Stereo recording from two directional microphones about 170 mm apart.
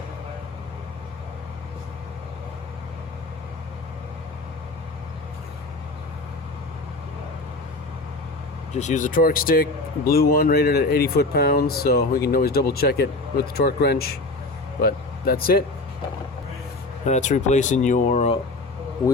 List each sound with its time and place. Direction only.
8.7 s speech: 45° left (ahead or behind); by 15.6 s 60° left (ahead or behind)
17.1 s speech: 45° left (ahead or behind)